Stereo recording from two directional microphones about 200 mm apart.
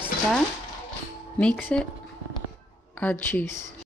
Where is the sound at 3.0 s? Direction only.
10° left (ahead or behind).